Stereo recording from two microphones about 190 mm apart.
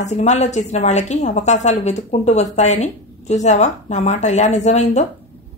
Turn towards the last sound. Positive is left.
turn(degrees=35)  # may be behind; listen again after turning